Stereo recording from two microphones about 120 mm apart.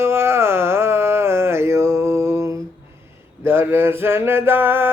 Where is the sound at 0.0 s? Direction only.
20° right (ahead or behind).